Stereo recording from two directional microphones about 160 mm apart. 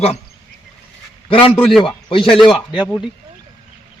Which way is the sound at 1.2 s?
35° left (ahead or behind).